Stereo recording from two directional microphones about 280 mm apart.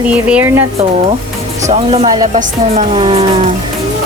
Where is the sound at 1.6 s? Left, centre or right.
Right.